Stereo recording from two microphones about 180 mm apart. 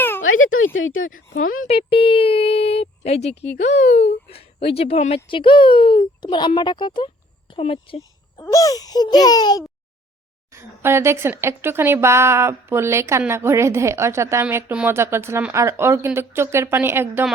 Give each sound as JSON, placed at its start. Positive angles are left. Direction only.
{"t": 0.2, "sound": "speech", "side_deg": 90}
{"t": 1.6, "sound": "speech", "side_deg": 30}
{"t": 10.5, "sound": "speech", "side_deg": -15}